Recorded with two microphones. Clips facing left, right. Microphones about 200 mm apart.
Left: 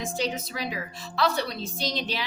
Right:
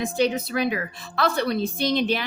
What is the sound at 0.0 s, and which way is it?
A woman's voice, 60° right (ahead or behind).